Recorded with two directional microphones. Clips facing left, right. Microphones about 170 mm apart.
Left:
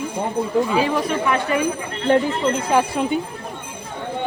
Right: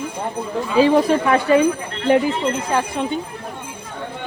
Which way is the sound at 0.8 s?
30° right (ahead or behind).